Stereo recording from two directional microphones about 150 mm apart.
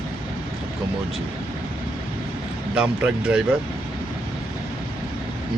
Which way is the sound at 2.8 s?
5° right (ahead or behind).